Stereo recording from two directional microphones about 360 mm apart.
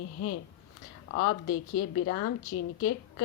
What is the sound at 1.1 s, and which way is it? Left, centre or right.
Speech, left.